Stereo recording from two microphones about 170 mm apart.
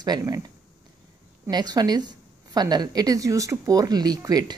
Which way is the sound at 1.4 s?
25° right (ahead or behind).